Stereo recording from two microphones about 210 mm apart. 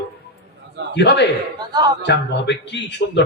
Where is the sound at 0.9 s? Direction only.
55° left (ahead or behind).